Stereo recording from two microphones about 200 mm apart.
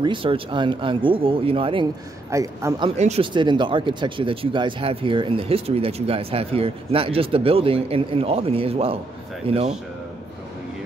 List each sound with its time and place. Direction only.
0.0 s speech: 25° right (ahead or behind)
2.3 s a man's voice: 15° right (ahead or behind)
3.0 s speech: 30° right (ahead or behind)